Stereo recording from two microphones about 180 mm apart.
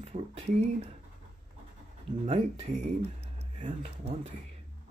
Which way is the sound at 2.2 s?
35° right (ahead or behind).